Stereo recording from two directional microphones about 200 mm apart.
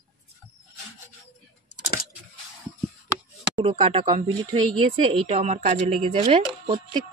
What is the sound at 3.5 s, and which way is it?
Speech, 25° right (ahead or behind).